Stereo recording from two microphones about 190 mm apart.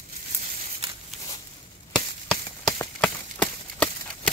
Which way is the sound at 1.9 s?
5° left (ahead or behind).